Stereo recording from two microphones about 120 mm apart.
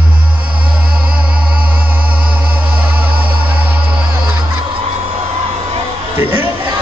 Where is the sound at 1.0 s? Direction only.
10° right (ahead or behind).